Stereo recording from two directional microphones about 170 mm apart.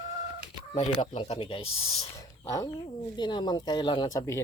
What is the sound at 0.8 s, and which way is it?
Speech, 30° left (ahead or behind).